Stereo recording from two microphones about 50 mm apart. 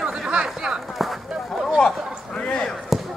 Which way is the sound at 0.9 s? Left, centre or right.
Centre.